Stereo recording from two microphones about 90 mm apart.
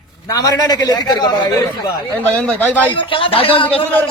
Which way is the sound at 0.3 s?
50° left (ahead or behind).